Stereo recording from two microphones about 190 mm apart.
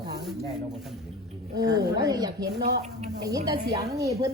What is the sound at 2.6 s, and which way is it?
Speech, 35° right (ahead or behind).